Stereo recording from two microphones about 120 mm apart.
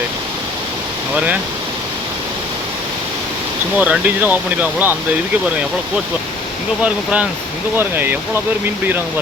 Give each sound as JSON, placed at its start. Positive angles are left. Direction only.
{"t": 1.1, "sound": "speech", "side_deg": -10}
{"t": 3.8, "sound": "speech", "side_deg": -10}
{"t": 6.8, "sound": "speech", "side_deg": -10}